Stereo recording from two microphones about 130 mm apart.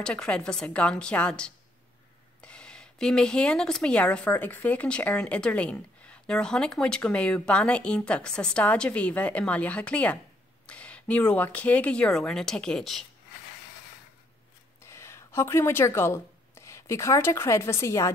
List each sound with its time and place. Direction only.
0.0 s speech: 5° left (ahead or behind)
14.8 s speech: 20° left (ahead or behind)